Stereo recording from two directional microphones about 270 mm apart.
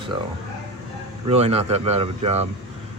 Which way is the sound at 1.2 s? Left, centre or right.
Right.